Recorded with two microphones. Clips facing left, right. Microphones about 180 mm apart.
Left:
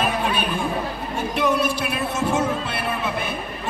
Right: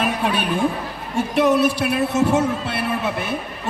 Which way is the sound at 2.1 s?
70° right (ahead or behind).